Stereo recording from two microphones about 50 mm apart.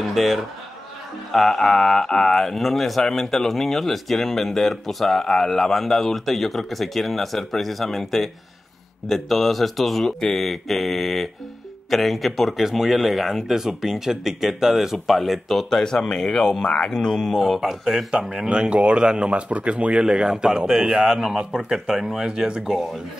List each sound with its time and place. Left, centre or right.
0.0 s a sound: centre
1.3 s speech: centre
17.6 s speech: centre